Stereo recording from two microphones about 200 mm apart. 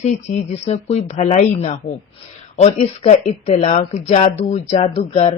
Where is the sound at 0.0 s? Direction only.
35° left (ahead or behind).